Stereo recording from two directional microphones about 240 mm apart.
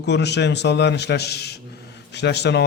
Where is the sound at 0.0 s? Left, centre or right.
Left.